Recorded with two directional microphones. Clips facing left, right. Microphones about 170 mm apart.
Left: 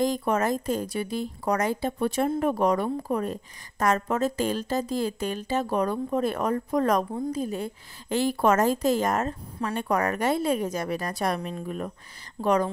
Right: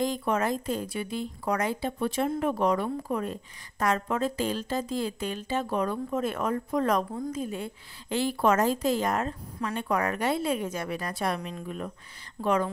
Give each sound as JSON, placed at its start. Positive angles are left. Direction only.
{"t": 0.0, "sound": "a woman's voice", "side_deg": 40}